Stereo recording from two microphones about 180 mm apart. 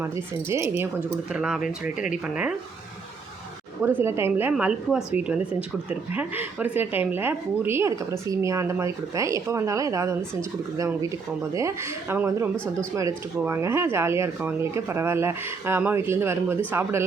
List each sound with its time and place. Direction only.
0.0 s a woman's voice: 15° right (ahead or behind)
3.8 s a woman's voice: 15° right (ahead or behind)
11.5 s a woman's voice: 15° right (ahead or behind)